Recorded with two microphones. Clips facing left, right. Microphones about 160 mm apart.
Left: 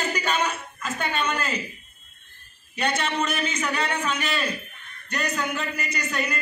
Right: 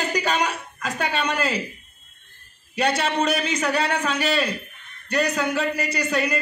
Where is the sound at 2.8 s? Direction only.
35° right (ahead or behind).